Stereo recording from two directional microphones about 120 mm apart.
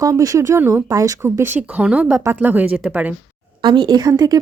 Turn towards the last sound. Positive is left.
turn(degrees=-30)  # may be behind; listen again after turning